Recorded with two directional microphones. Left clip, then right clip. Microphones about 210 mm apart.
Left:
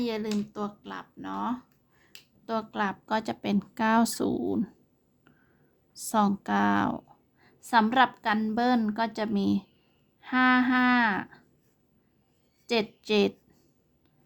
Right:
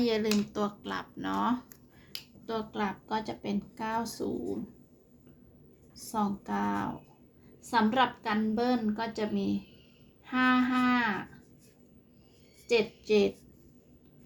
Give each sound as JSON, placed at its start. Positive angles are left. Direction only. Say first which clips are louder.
{"t": 0.0, "sound": "speech", "louder": "right 3 dB", "side_deg": 10}
{"t": 2.5, "sound": "a woman's voice", "louder": "left 4 dB", "side_deg": 30}
{"t": 6.1, "sound": "a woman's voice", "louder": "left 7 dB", "side_deg": 40}
{"t": 12.6, "sound": "a woman's voice", "louder": "right 1 dB", "side_deg": 35}